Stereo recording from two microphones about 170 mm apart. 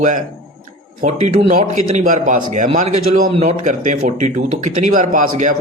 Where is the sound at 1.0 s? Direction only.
40° right (ahead or behind).